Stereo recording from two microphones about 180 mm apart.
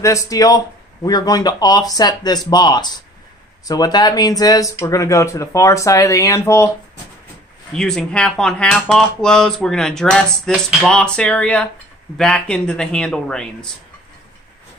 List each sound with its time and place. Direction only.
0.0 s speech: 15° left (ahead or behind)
7.7 s speech: 5° left (ahead or behind)